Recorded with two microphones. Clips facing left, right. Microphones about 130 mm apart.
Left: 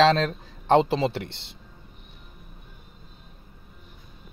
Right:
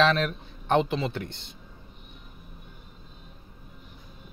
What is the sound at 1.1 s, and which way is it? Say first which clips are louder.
Speech: left 1 dB; 75° left (ahead or behind).